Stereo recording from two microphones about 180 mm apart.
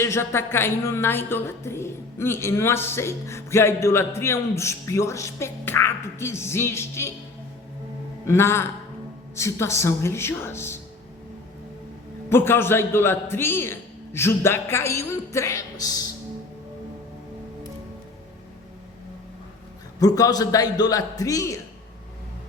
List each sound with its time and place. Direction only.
0.0 s a woman's voice: 15° left (ahead or behind)
8.3 s a woman's voice: 15° left (ahead or behind)
12.3 s a woman's voice: 15° left (ahead or behind)
20.0 s a man's voice: 20° left (ahead or behind)